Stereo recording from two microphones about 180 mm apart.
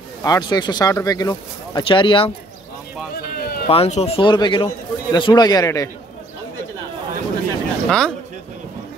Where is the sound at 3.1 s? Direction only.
60° left (ahead or behind).